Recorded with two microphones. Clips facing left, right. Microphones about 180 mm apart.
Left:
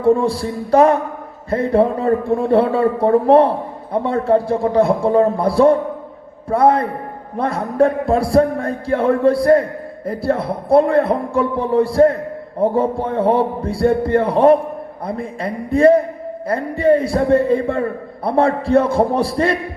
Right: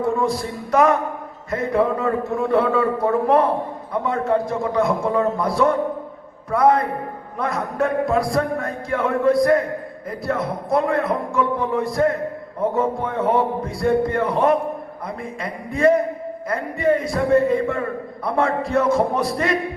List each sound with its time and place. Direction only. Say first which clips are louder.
0.0 s a man's voice: left 6 dB; 30° left (ahead or behind)